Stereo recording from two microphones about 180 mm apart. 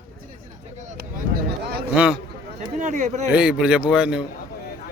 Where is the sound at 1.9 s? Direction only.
10° right (ahead or behind).